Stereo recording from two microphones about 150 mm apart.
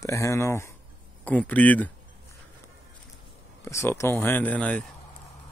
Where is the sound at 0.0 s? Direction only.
20° left (ahead or behind).